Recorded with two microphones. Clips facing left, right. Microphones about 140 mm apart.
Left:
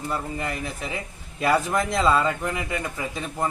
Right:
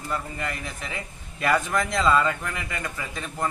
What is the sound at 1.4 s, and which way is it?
Speech, 30° left (ahead or behind).